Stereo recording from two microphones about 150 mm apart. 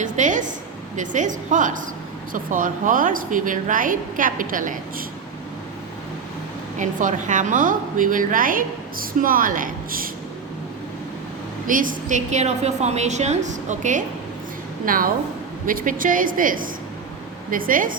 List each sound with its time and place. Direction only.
0.0 s a woman's voice: 55° right (ahead or behind)
6.7 s a woman's voice: 55° right (ahead or behind)
11.7 s a woman's voice: 65° right (ahead or behind)
14.8 s a woman's voice: 70° right (ahead or behind)